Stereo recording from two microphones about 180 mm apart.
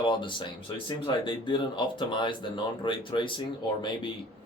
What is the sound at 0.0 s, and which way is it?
Speech, 25° left (ahead or behind).